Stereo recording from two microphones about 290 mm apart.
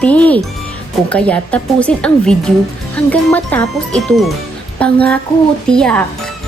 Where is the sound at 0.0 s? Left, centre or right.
Centre.